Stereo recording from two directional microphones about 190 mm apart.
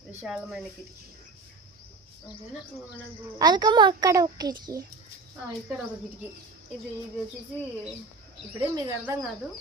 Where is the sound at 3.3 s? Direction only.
20° right (ahead or behind).